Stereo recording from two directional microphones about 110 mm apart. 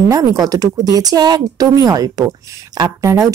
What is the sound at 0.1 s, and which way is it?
Speech, 35° right (ahead or behind).